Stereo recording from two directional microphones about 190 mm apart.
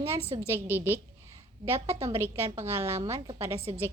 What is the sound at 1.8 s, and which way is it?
Speech, 35° right (ahead or behind).